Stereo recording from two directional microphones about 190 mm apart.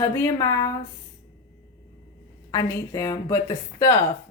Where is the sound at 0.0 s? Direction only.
15° left (ahead or behind).